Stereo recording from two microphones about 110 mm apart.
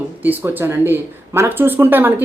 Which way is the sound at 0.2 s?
20° right (ahead or behind).